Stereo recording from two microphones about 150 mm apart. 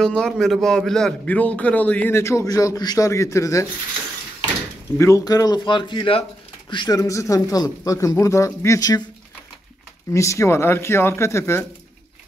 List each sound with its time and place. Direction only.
0.0 s a man's voice: 5° left (ahead or behind)
4.9 s speech: 20° left (ahead or behind)
10.1 s a man's voice: 20° left (ahead or behind)